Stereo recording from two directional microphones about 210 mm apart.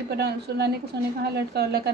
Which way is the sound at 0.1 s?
50° right (ahead or behind).